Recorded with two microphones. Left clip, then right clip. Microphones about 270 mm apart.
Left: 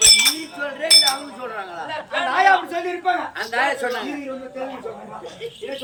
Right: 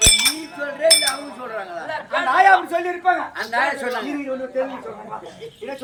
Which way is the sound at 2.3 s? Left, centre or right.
Centre.